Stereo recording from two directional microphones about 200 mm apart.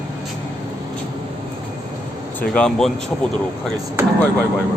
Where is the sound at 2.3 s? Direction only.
5° left (ahead or behind).